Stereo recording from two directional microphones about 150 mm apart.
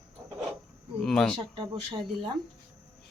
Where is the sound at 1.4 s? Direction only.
35° right (ahead or behind).